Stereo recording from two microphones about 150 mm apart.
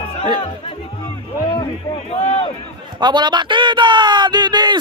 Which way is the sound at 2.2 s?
40° left (ahead or behind).